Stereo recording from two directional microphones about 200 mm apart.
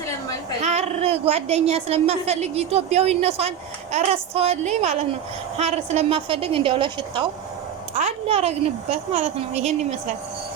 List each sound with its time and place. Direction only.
0.6 s a woman's voice: 35° right (ahead or behind)